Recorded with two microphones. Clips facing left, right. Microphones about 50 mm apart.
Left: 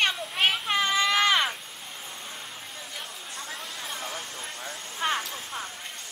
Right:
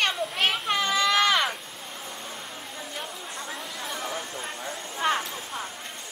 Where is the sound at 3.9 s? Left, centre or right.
Right.